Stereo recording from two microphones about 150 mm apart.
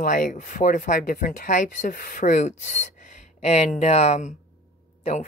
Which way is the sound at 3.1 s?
50° left (ahead or behind).